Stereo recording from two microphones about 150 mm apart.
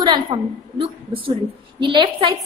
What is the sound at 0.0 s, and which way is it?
A woman's voice, 30° right (ahead or behind).